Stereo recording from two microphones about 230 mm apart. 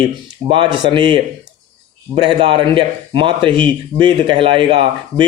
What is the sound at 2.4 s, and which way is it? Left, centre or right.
Speech, right.